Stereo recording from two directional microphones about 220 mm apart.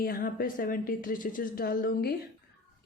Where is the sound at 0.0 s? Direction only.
40° left (ahead or behind).